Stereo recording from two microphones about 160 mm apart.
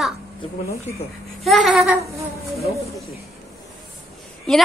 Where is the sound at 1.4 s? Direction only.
Centre (ahead or behind).